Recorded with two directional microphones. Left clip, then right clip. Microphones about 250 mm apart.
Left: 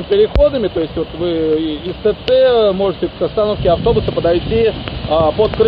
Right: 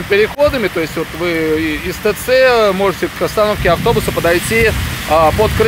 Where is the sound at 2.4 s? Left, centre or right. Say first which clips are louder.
Right 2 dB; right.